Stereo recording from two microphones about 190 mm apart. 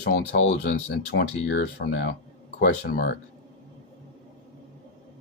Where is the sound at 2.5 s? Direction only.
55° left (ahead or behind).